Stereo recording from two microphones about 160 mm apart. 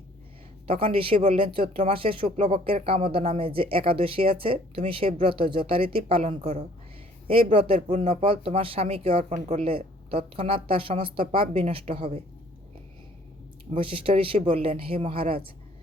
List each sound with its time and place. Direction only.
0.7 s speech: 35° right (ahead or behind)
13.7 s speech: 35° right (ahead or behind)